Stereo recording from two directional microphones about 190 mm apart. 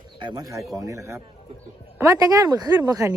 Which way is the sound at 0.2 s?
20° right (ahead or behind).